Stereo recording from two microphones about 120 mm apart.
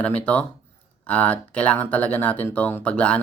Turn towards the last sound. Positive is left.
turn(degrees=10)  # may be behind; listen again after turning